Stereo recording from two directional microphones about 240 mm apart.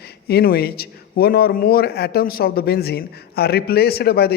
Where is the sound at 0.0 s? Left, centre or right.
Left.